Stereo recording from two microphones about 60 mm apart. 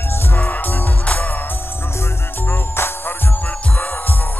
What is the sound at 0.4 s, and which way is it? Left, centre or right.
Music, left.